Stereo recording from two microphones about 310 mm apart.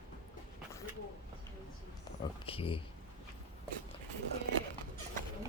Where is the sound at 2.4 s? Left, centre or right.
Centre.